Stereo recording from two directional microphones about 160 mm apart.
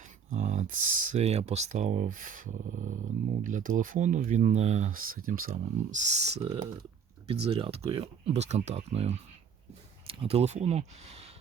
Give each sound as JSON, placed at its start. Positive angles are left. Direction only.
{"t": 0.3, "sound": "speech", "side_deg": -45}